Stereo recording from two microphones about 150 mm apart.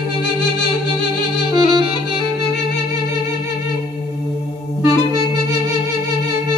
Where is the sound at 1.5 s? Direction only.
30° right (ahead or behind).